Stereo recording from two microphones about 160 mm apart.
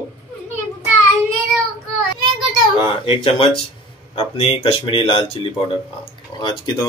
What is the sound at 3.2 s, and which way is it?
Speech, 40° left (ahead or behind).